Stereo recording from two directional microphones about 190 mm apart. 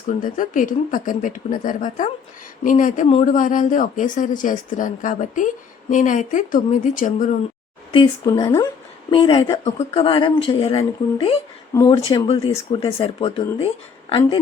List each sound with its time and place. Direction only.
0.1 s speech: 45° left (ahead or behind)
7.9 s speech: 20° left (ahead or behind)
11.7 s speech: 15° left (ahead or behind)
12.0 s speech: 30° left (ahead or behind)